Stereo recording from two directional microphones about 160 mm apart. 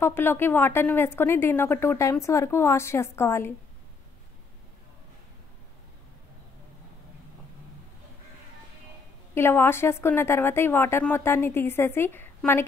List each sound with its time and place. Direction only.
0.0 s a woman's voice: 15° left (ahead or behind)
9.3 s a woman's voice: 15° left (ahead or behind)